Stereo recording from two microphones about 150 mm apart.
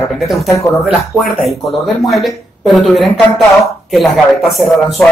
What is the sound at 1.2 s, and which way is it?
Speech, centre (ahead or behind).